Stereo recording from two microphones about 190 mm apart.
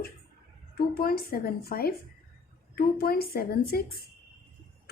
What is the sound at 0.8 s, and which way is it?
A woman's voice, 50° left (ahead or behind).